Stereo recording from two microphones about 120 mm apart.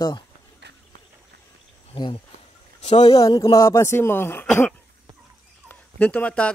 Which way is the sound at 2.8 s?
60° left (ahead or behind).